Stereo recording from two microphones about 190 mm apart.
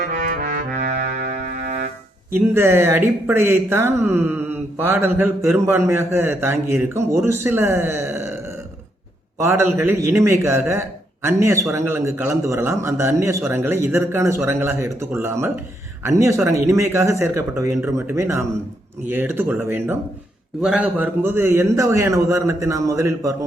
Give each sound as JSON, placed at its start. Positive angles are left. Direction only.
{"t": 0.0, "sound": "music", "side_deg": -45}
{"t": 2.3, "sound": "a man's voice", "side_deg": -10}
{"t": 9.4, "sound": "a man's voice", "side_deg": -15}